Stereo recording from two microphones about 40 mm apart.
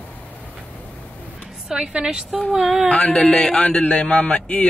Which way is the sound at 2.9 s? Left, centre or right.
Left.